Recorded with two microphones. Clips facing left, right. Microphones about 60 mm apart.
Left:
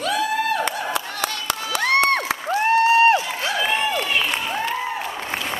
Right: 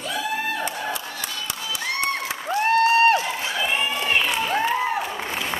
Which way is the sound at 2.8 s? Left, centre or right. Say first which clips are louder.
Left 2 dB; left.